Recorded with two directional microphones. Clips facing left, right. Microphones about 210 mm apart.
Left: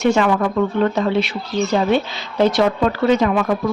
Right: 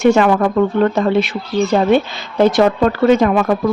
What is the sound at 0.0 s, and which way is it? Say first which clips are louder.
Speech: right 4 dB; 50° right (ahead or behind).